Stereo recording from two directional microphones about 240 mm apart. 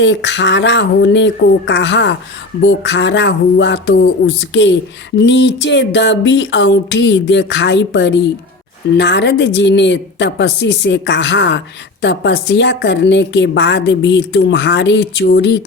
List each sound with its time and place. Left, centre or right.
0.0 s a woman's voice: left